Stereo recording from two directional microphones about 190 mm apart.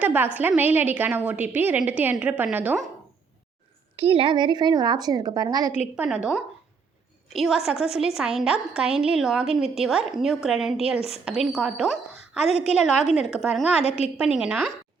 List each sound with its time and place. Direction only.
0.0 s a sound: 10° right (ahead or behind)
0.3 s a woman's voice: 10° right (ahead or behind)
3.9 s a woman's voice: 30° right (ahead or behind)
6.0 s a woman's voice: 10° right (ahead or behind)
7.3 s a woman's voice: centre (ahead or behind)
12.5 s a woman's voice: 35° left (ahead or behind)
12.8 s a woman's voice: centre (ahead or behind)
13.8 s a woman's voice: 35° left (ahead or behind)
14.2 s a woman's voice: 5° right (ahead or behind)